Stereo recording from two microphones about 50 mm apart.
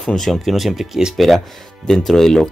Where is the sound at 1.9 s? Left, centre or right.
Centre.